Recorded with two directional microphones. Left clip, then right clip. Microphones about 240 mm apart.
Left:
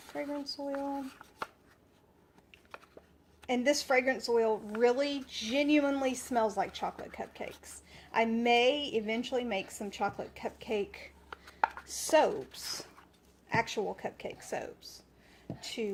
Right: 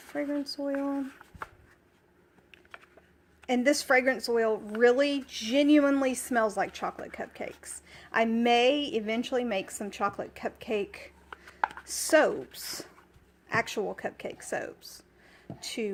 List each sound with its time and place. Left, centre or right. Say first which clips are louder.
0.1 s a woman's voice: right 5 dB; right
3.4 s a woman's voice: right 4 dB; right